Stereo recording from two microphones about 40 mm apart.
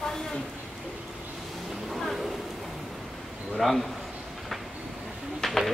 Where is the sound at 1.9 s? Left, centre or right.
Centre.